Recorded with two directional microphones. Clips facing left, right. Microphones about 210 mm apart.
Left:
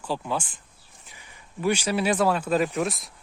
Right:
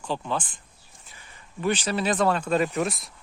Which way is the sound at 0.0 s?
10° left (ahead or behind).